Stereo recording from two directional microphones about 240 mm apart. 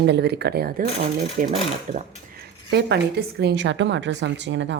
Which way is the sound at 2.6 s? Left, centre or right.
Right.